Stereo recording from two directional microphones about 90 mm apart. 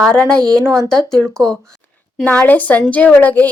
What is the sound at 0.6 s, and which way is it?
Speech, 30° right (ahead or behind).